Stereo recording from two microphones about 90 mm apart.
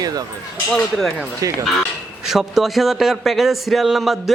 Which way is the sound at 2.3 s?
5° right (ahead or behind).